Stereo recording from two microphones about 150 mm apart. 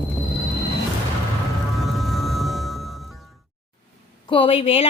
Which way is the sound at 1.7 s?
Centre (ahead or behind).